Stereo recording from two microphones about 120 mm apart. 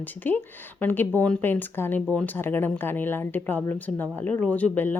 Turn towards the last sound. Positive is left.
turn(degrees=15)  # may be behind; listen again after turning